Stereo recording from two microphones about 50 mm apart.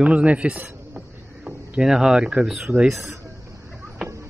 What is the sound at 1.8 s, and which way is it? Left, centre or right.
Speech, centre.